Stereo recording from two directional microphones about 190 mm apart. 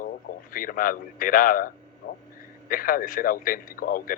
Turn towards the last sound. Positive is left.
turn(degrees=50)  # may be behind; listen again after turning